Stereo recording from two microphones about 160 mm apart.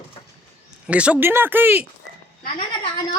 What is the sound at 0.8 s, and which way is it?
Speech, 5° right (ahead or behind).